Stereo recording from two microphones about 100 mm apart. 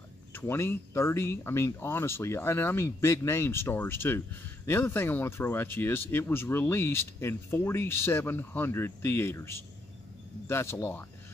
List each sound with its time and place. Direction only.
0.3 s speech: 25° left (ahead or behind)